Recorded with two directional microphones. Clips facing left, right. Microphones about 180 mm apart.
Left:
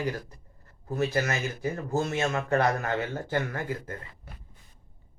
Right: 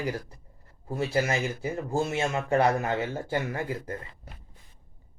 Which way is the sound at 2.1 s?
15° right (ahead or behind).